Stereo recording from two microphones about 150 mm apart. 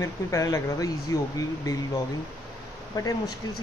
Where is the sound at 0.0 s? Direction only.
20° left (ahead or behind).